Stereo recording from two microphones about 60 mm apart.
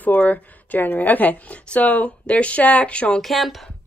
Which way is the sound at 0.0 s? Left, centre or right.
Left.